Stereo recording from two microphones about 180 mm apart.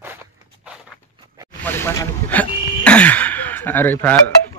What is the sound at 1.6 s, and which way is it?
Speech, 10° left (ahead or behind).